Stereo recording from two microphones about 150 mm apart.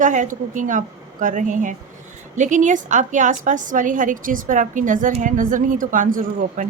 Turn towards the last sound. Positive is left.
turn(degrees=-60)  # may be behind; listen again after turning